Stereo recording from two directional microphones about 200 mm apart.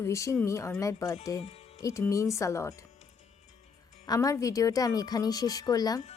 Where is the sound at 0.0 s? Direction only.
15° left (ahead or behind).